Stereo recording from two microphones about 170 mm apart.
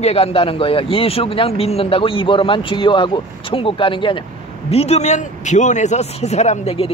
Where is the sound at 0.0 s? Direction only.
35° left (ahead or behind).